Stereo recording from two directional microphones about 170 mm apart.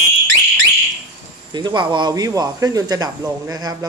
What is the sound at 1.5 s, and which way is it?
Speech, 25° right (ahead or behind).